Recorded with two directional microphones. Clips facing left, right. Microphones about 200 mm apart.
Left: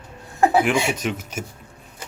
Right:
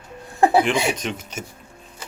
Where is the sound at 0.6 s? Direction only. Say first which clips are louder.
Left 1 dB; 5° left (ahead or behind).